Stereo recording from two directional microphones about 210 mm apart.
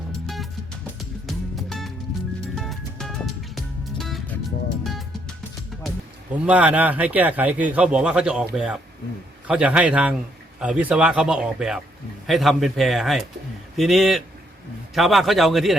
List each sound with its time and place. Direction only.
1.3 s music: centre (ahead or behind)
6.3 s a man's voice: 5° right (ahead or behind)